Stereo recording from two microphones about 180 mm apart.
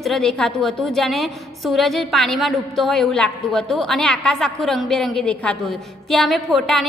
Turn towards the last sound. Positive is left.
turn(degrees=0)  # may be behind; listen again after turning